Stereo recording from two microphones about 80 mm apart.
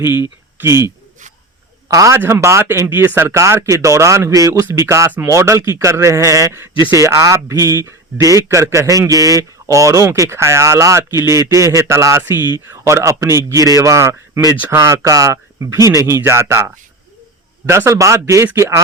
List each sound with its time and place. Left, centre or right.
0.6 s speech: right
1.9 s speech: right
2.1 s speech: right
6.9 s a man's voice: right
12.2 s speech: right